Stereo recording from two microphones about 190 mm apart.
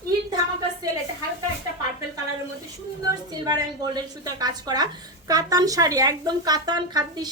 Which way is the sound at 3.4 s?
20° right (ahead or behind).